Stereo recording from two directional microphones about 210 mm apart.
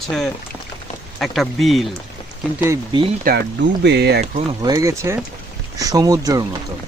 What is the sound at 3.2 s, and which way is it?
Speech, 50° right (ahead or behind).